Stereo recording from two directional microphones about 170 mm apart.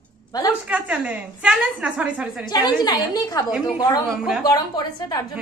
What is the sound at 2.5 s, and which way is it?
Speech, 25° left (ahead or behind).